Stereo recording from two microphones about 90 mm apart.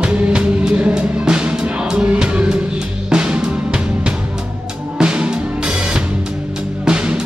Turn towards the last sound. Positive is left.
turn(degrees=-10)  # may be behind; listen again after turning